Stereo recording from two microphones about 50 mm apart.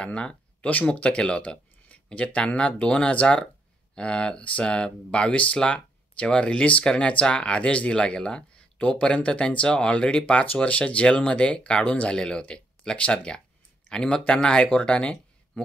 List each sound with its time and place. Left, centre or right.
0.0 s speech: left
12.1 s speech: centre